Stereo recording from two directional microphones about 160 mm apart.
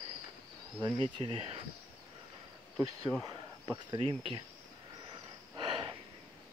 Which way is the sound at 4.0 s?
35° right (ahead or behind).